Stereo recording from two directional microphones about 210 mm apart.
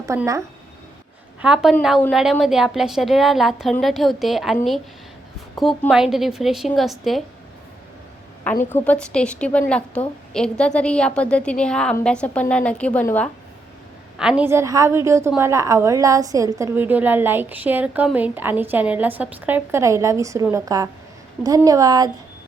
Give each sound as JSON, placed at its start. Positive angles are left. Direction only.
{"t": 0.0, "sound": "speech", "side_deg": -15}
{"t": 1.4, "sound": "a woman's voice", "side_deg": -5}
{"t": 8.7, "sound": "a woman's voice", "side_deg": 5}
{"t": 14.2, "sound": "a woman's voice", "side_deg": -5}